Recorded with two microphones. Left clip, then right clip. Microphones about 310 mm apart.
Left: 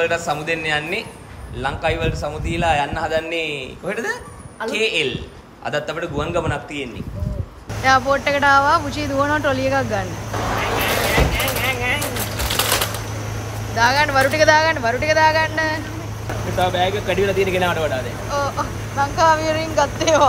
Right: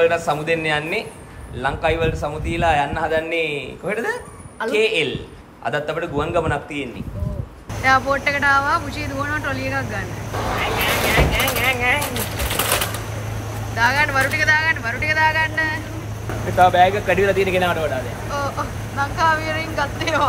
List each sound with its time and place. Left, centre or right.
0.0 s a man's voice: centre
11.1 s a sound: centre
13.7 s speech: centre
16.5 s a man's voice: centre